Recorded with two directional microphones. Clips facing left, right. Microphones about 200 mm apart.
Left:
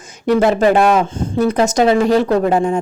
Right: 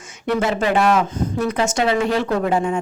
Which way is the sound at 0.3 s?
40° left (ahead or behind).